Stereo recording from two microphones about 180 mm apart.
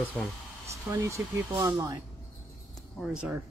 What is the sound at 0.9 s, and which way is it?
Speech, 15° right (ahead or behind).